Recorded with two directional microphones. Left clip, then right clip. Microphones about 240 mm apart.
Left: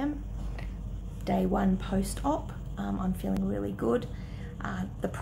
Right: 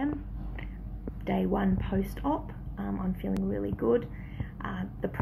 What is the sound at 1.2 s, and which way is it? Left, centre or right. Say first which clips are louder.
Speech: left 1 dB; centre.